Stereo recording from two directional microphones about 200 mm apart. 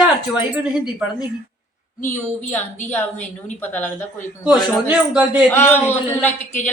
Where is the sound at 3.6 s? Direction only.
10° left (ahead or behind).